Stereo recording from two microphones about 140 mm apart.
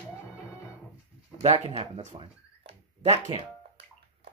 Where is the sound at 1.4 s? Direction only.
45° right (ahead or behind).